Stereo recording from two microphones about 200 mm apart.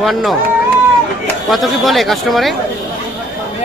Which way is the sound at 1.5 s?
Centre (ahead or behind).